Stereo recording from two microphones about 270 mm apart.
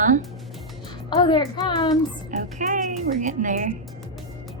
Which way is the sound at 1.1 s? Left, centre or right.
Centre.